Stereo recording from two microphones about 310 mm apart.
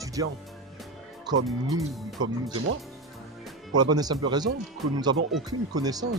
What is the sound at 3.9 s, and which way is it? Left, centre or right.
Speech, centre.